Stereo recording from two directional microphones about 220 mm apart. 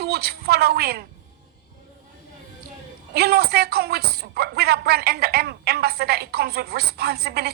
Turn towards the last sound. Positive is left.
turn(degrees=-45)  # may be behind; listen again after turning